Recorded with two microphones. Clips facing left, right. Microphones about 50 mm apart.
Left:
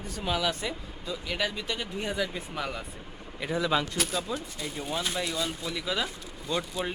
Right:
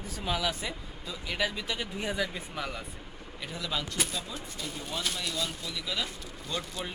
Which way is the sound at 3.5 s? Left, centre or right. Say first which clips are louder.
Left 8 dB; left.